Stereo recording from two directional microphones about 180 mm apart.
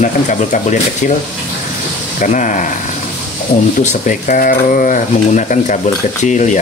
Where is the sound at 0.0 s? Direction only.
45° left (ahead or behind).